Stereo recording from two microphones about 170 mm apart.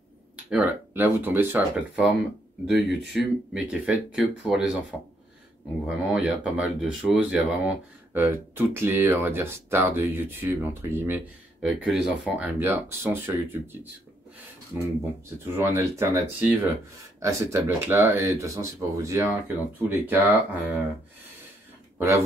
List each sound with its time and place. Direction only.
0.5 s speech: 10° right (ahead or behind)
5.9 s speech: 5° right (ahead or behind)
21.9 s a sound: 15° right (ahead or behind)